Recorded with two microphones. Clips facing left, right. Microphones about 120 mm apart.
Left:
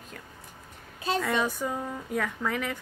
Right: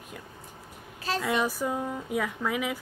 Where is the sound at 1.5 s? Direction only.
5° right (ahead or behind).